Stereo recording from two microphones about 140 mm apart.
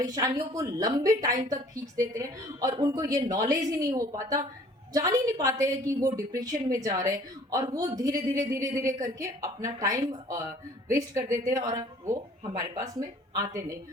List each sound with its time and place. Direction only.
0.0 s a woman's voice: 25° right (ahead or behind)